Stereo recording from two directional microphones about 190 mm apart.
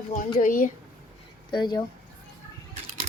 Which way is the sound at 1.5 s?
20° left (ahead or behind).